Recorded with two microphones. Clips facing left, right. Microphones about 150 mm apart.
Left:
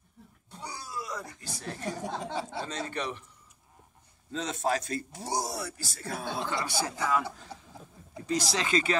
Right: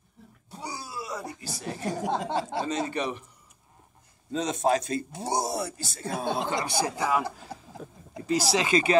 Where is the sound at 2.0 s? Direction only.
90° right.